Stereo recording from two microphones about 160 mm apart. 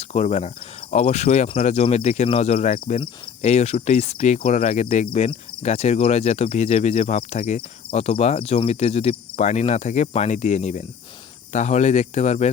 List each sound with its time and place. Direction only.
0.1 s cricket: 45° left (ahead or behind)
2.6 s cricket: 55° left (ahead or behind)
3.0 s cricket: 40° left (ahead or behind)